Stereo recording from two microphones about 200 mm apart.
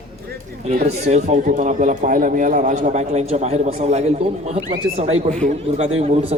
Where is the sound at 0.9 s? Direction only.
35° right (ahead or behind).